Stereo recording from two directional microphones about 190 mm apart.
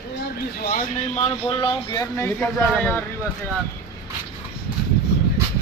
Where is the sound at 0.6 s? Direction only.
50° left (ahead or behind); by 3.0 s 10° left (ahead or behind).